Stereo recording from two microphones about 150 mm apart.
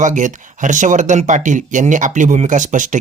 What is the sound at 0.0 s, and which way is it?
Speech, 55° right (ahead or behind).